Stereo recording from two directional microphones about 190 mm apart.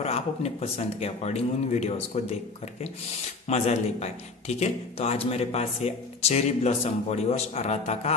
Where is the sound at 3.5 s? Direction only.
35° left (ahead or behind).